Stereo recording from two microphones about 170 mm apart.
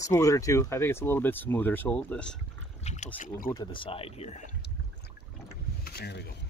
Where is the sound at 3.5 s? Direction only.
25° left (ahead or behind).